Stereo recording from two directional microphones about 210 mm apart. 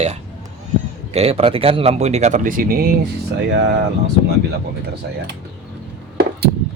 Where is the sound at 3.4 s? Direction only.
55° right (ahead or behind).